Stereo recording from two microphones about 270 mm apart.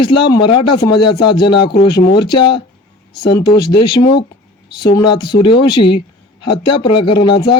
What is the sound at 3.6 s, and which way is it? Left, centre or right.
A man's voice, centre.